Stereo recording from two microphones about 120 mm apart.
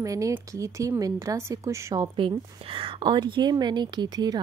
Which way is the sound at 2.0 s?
45° right (ahead or behind).